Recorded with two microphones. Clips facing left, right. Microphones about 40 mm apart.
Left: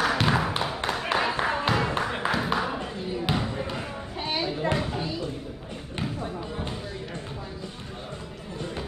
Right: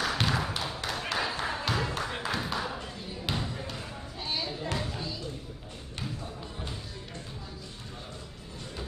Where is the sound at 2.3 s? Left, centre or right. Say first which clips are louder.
Left 6 dB; left.